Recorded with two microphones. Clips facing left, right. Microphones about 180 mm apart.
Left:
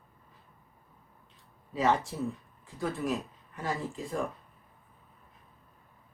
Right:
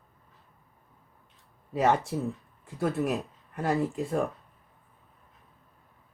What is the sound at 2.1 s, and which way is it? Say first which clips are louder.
Speech: right 3 dB; 60° right (ahead or behind).